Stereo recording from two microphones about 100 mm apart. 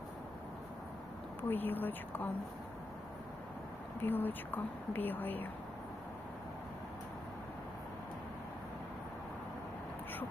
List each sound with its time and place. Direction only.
1.4 s speech: 20° left (ahead or behind)
4.0 s speech: 20° left (ahead or behind)